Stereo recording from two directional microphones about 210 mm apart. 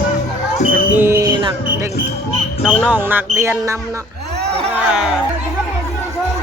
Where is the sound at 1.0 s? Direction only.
10° right (ahead or behind).